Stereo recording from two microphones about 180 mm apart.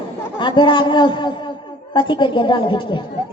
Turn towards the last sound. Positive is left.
turn(degrees=25)  # may be behind; listen again after turning